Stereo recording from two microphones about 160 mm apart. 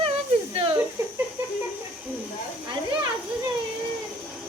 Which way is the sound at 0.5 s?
35° right (ahead or behind).